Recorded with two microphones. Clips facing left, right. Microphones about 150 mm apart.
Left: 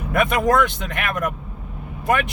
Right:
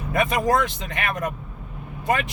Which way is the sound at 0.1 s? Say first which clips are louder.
Left 2 dB; 75° left (ahead or behind).